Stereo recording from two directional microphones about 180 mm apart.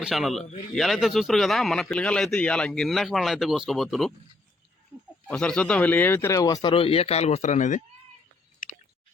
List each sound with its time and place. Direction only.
0.0 s a man's voice: centre (ahead or behind)
5.3 s speech: 5° left (ahead or behind); by 7.8 s 40° left (ahead or behind)